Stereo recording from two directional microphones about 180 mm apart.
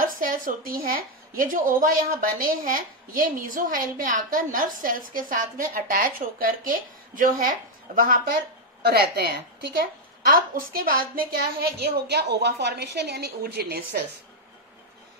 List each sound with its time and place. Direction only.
0.0 s a woman's voice: 50° right (ahead or behind)
8.8 s a woman's voice: 65° right (ahead or behind)